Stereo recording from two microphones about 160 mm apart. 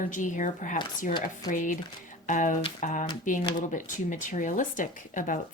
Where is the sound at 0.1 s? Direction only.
55° left (ahead or behind).